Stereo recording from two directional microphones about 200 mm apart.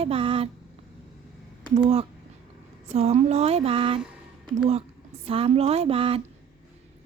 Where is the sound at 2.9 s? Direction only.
30° right (ahead or behind).